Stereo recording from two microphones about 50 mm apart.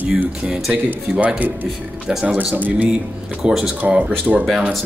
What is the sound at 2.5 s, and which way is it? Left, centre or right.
Speech, right.